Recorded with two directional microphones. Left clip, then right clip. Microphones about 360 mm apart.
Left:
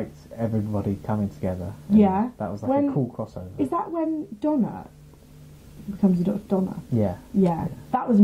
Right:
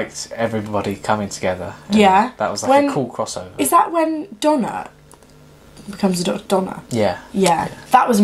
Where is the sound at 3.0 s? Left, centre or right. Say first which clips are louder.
Right 8 dB; centre.